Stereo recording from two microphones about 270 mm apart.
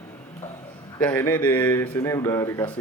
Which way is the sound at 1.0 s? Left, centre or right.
Centre.